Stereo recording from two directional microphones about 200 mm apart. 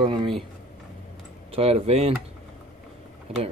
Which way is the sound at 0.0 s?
25° right (ahead or behind).